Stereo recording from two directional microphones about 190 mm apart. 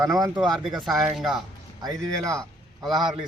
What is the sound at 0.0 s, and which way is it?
Speech, 20° right (ahead or behind).